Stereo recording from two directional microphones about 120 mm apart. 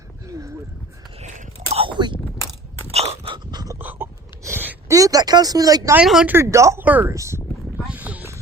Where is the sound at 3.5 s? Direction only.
30° right (ahead or behind).